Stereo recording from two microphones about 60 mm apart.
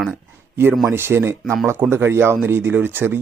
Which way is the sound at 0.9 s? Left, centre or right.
Right.